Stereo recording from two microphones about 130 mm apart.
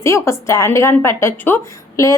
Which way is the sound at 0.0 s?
20° left (ahead or behind).